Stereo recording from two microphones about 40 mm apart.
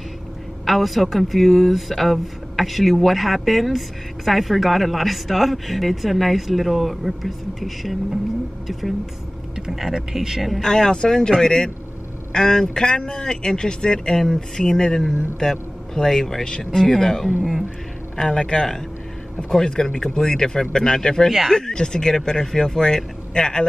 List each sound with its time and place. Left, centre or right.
0.7 s speech: centre
9.7 s a woman's voice: centre
10.6 s speech: centre